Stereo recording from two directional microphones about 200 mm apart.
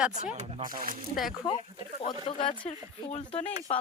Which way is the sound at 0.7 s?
45° right (ahead or behind).